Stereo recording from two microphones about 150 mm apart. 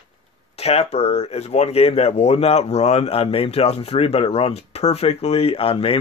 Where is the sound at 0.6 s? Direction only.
45° left (ahead or behind).